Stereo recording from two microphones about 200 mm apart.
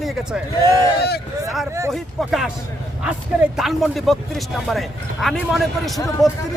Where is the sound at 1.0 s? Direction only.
55° left (ahead or behind).